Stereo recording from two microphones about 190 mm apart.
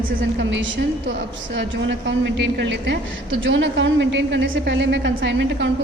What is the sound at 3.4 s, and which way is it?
A woman's voice, 75° right (ahead or behind).